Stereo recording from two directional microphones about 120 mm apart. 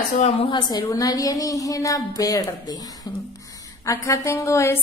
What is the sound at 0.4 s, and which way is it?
A woman's voice, 40° left (ahead or behind).